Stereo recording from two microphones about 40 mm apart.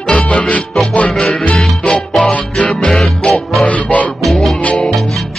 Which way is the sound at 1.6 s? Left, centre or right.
Left.